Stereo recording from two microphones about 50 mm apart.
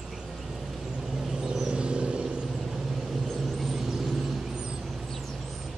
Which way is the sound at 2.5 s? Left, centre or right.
Centre.